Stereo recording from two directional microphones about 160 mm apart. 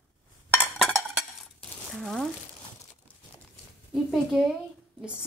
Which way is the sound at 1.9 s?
Centre (ahead or behind).